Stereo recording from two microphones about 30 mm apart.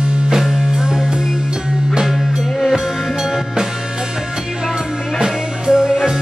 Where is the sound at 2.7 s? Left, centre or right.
Centre.